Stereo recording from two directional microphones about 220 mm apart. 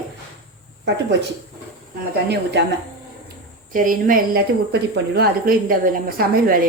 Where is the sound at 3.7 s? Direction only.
40° right (ahead or behind).